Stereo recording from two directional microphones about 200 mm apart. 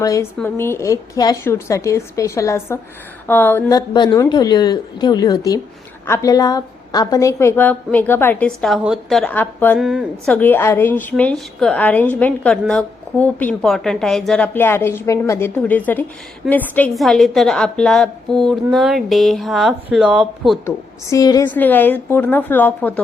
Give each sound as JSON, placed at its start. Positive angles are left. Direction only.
{"t": 0.0, "sound": "a woman's voice", "side_deg": 15}
{"t": 9.8, "sound": "a woman's voice", "side_deg": 0}
{"t": 10.3, "sound": "a woman's voice", "side_deg": 10}
{"t": 20.7, "sound": "a woman's voice", "side_deg": 15}